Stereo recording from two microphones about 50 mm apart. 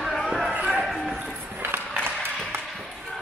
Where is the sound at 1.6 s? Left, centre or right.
Right.